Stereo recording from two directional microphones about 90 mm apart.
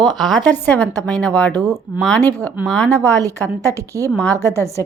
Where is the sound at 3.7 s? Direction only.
35° right (ahead or behind).